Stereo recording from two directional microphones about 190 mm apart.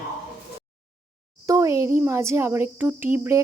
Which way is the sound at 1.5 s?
15° right (ahead or behind).